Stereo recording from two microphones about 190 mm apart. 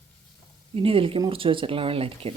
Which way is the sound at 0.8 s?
30° right (ahead or behind).